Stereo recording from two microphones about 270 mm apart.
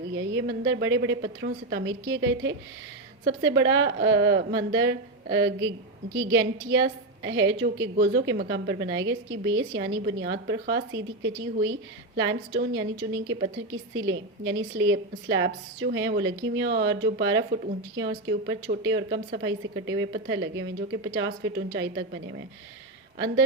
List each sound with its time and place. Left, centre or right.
0.1 s a woman's voice: right